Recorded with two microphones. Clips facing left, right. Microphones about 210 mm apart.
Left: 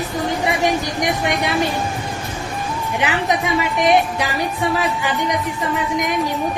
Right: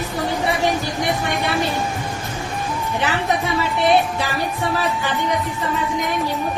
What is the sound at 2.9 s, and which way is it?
A woman's voice, 15° left (ahead or behind).